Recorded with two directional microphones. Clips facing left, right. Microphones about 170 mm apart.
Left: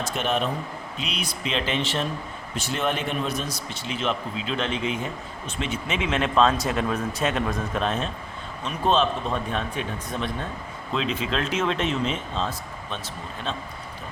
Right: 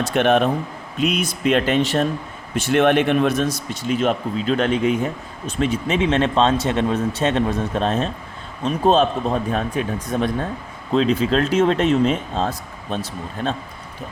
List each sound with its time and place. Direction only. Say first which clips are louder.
0.1 s speech: right 10 dB; 60° right (ahead or behind)
0.9 s speech: right 13 dB; 50° right (ahead or behind)
2.6 s speech: right 11 dB; 65° right (ahead or behind); by 13.6 s 45° right (ahead or behind)